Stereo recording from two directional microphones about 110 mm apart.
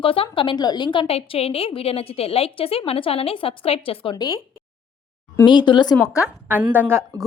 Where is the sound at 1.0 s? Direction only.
65° left (ahead or behind).